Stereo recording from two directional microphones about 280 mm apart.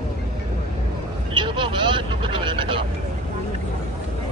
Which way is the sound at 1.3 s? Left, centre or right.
Centre.